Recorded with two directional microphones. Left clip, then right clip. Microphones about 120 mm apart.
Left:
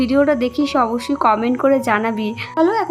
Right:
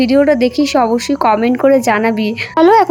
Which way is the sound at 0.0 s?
25° right (ahead or behind).